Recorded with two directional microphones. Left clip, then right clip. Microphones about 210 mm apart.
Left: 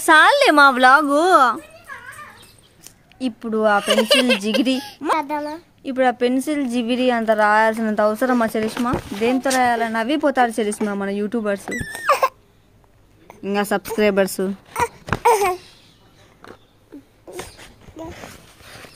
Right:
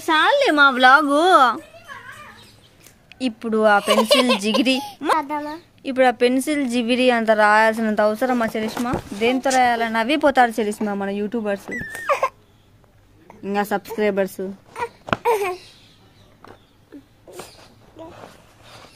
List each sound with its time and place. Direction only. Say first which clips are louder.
0.0 s a woman's voice: left 4 dB; 25° left (ahead or behind)
0.7 s a woman's voice: even; 5° left (ahead or behind)
3.2 s a woman's voice: right 1 dB; centre (ahead or behind)
3.8 s a woman's voice: even; 30° left (ahead or behind)
5.0 s a woman's voice: left 1 dB; 5° left (ahead or behind)
12.1 s a sound: left 3 dB; 40° left (ahead or behind)
13.4 s speech: left 1 dB; 5° left (ahead or behind)
13.9 s a woman's voice: left 4 dB; 20° left (ahead or behind)
14.7 s baby cry: even; 45° left (ahead or behind)
18.0 s a sound: left 4 dB; 45° left (ahead or behind)